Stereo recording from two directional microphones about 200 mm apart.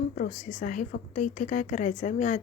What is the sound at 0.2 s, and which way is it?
Speech, 45° left (ahead or behind).